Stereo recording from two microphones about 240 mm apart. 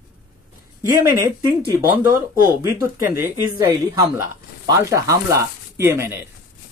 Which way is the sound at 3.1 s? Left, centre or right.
Centre.